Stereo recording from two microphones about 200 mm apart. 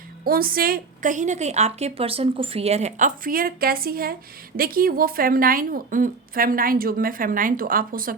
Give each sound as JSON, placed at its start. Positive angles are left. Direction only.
{"t": 0.3, "sound": "a woman's voice", "side_deg": -45}